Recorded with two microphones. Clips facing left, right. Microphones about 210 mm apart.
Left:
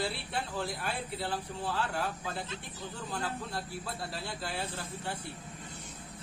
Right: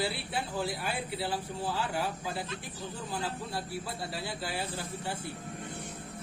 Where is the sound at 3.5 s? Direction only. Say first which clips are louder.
Right 2 dB; centre (ahead or behind).